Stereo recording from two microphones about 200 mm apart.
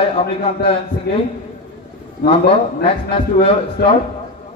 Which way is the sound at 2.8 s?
30° left (ahead or behind).